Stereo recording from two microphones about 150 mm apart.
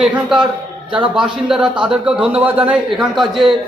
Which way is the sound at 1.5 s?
5° right (ahead or behind).